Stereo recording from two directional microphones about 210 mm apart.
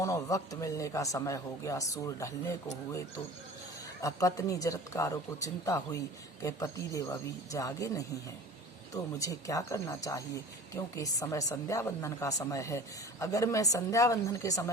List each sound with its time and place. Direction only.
0.0 s speech: 15° left (ahead or behind)
4.0 s speech: 15° left (ahead or behind)